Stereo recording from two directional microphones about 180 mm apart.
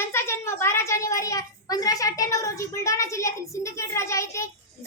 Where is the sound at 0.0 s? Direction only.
15° left (ahead or behind).